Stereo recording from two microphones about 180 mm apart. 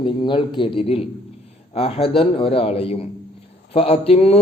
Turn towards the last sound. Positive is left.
turn(degrees=35)  # may be behind; listen again after turning